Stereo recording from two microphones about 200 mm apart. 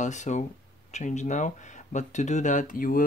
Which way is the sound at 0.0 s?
35° left (ahead or behind).